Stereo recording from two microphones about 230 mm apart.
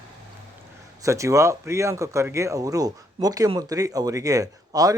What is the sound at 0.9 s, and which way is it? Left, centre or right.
A man's voice, centre.